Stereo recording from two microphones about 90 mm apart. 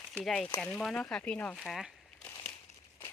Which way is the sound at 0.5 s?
10° left (ahead or behind).